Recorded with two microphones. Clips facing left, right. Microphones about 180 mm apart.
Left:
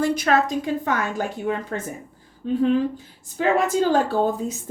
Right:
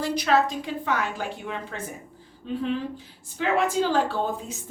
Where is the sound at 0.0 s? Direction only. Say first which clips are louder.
Left 3 dB; 50° left (ahead or behind).